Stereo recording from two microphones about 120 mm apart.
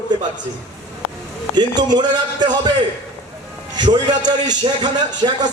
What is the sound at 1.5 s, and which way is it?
Speech, 35° right (ahead or behind).